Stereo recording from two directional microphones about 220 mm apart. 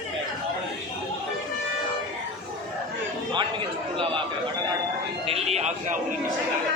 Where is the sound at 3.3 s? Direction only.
25° right (ahead or behind).